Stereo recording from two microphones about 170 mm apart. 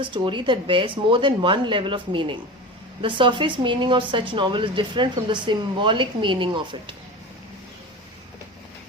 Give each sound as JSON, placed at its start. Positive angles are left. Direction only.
{"t": 0.0, "sound": "a woman's voice", "side_deg": -30}